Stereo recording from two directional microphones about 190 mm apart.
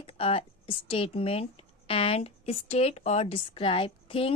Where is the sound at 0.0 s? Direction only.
30° left (ahead or behind).